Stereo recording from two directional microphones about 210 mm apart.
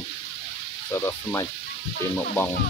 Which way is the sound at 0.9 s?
15° left (ahead or behind).